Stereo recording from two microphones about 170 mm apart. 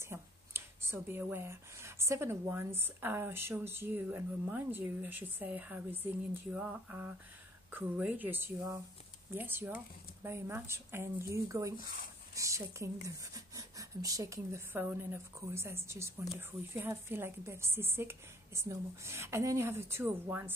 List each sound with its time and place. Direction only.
0.0 s speech: 15° right (ahead or behind)